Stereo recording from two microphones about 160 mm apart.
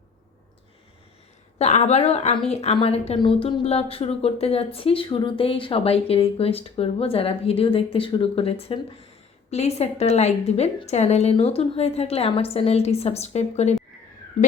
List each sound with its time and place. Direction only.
1.5 s a woman's voice: 40° left (ahead or behind)